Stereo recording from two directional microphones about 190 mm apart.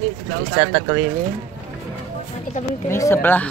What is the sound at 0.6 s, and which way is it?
Speech, 15° right (ahead or behind).